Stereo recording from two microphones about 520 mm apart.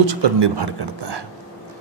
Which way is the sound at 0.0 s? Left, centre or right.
Right.